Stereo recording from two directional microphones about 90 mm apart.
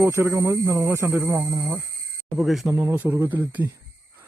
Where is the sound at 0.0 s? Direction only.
30° right (ahead or behind).